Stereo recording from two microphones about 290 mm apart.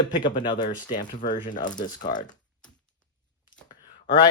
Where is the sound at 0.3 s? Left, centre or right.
Centre.